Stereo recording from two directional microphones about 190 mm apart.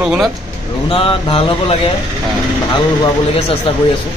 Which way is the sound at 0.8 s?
30° left (ahead or behind).